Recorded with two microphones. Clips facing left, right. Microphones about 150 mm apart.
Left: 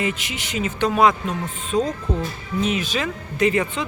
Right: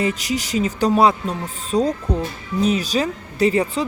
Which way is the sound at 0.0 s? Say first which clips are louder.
Right 4 dB; 35° right (ahead or behind).